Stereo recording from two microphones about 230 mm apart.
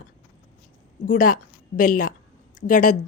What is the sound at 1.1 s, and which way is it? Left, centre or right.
A woman's voice, left.